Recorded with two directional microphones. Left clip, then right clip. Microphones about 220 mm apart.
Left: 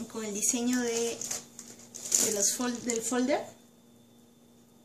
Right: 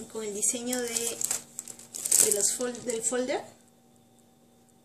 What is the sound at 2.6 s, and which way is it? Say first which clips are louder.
Speech: right 1 dB; centre (ahead or behind).